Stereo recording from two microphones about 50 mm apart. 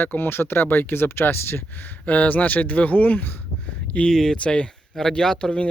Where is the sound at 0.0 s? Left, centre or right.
Left.